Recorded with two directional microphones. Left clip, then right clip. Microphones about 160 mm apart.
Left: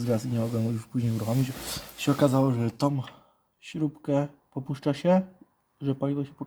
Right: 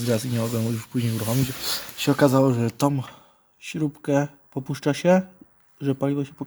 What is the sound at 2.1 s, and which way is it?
Speech, 25° right (ahead or behind).